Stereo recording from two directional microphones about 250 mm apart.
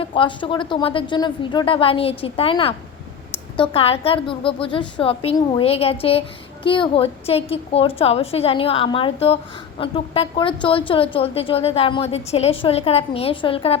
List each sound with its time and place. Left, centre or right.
0.0 s a woman's voice: left